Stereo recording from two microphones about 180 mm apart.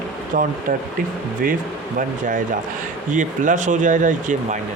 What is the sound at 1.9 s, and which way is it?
Speech, 45° right (ahead or behind).